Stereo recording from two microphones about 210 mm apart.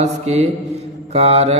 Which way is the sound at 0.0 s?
30° right (ahead or behind).